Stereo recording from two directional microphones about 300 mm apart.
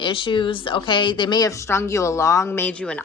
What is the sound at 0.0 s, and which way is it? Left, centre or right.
A woman's voice, centre.